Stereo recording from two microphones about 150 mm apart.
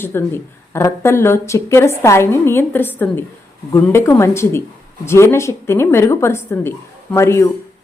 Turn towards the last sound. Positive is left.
turn(degrees=15)  # may be behind; listen again after turning